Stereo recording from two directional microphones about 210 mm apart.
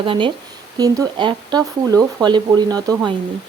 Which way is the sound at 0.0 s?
25° right (ahead or behind).